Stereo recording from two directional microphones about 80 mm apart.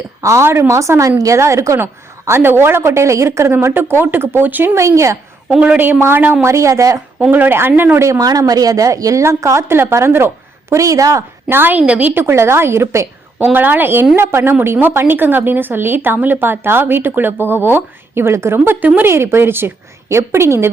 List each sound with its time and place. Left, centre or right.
0.2 s a woman's voice: right
5.5 s speech: centre
6.4 s a woman's voice: right
7.3 s a woman's voice: right
8.2 s a woman's voice: right
11.4 s a woman's voice: right
13.4 s a woman's voice: right